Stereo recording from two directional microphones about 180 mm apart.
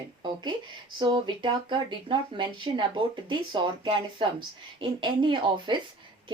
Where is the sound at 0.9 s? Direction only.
25° right (ahead or behind).